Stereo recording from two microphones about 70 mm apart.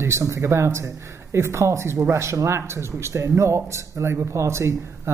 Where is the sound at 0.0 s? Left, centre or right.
Right.